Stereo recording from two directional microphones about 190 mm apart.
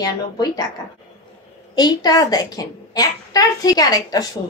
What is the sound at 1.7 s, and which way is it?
A woman's voice, 20° left (ahead or behind).